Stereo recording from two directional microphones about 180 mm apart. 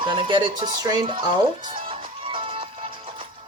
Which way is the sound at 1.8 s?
30° right (ahead or behind).